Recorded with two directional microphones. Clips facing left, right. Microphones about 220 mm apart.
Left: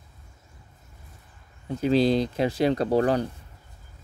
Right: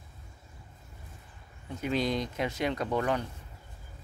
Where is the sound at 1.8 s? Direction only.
30° left (ahead or behind).